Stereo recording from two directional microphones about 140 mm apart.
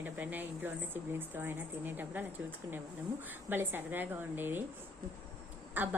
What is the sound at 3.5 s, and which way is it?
Speech, 15° right (ahead or behind).